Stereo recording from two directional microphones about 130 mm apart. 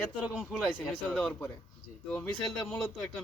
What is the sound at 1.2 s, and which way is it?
Speech, 10° left (ahead or behind).